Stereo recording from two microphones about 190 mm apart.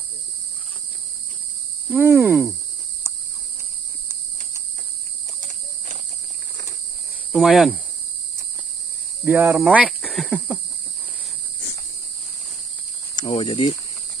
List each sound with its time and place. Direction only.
1.9 s a sound: 10° right (ahead or behind)
5.4 s cricket: 40° right (ahead or behind)
7.3 s speech: centre (ahead or behind)
9.2 s a sound: 10° right (ahead or behind)
9.6 s speech: 5° right (ahead or behind)
13.1 s speech: 20° left (ahead or behind)